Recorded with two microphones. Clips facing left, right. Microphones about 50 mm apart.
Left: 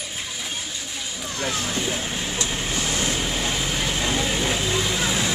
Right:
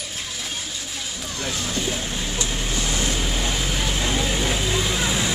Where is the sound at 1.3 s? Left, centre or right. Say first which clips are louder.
Left 1 dB; left.